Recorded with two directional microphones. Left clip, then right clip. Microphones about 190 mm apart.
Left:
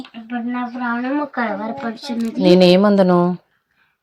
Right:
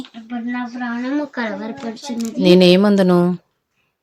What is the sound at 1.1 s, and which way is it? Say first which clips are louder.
Child singing: left 1 dB; 15° left (ahead or behind).